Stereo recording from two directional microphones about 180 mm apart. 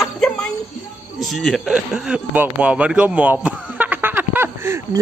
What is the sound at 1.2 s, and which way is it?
Speech, centre (ahead or behind).